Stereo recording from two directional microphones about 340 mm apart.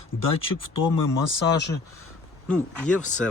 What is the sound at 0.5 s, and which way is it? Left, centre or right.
Speech, left.